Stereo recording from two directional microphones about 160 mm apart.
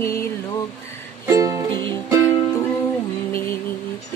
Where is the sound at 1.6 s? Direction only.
30° right (ahead or behind).